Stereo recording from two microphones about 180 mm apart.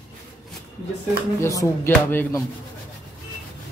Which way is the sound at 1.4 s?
15° left (ahead or behind).